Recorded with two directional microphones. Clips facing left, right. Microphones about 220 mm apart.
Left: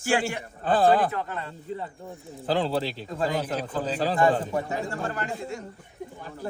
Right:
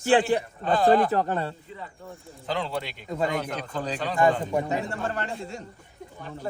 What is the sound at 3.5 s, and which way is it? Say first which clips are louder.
Speech: left 2 dB; 5° left (ahead or behind).